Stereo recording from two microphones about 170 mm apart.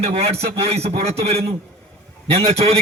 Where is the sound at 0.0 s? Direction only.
35° right (ahead or behind).